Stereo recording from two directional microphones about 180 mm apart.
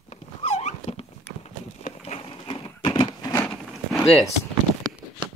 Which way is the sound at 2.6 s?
20° left (ahead or behind).